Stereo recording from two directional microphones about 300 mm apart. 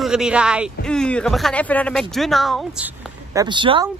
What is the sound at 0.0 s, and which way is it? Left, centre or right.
Speech, centre.